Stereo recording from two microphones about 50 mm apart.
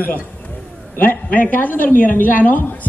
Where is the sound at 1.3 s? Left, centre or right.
Left.